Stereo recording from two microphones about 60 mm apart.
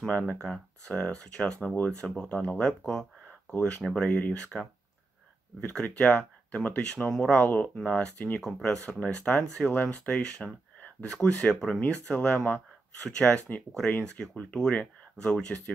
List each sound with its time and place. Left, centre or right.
0.0 s speech: left
3.3 s a sound: left
3.8 s speech: centre
4.1 s speech: left